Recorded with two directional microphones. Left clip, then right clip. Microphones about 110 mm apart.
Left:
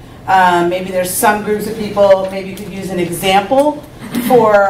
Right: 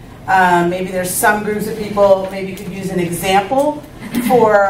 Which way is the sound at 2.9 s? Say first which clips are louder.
Left 2 dB; 10° left (ahead or behind).